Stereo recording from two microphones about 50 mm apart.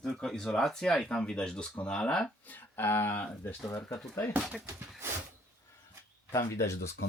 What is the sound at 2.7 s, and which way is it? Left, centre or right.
Speech, left.